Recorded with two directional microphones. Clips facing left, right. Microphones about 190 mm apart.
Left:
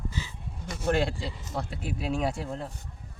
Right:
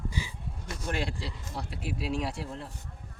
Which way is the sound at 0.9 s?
50° left (ahead or behind).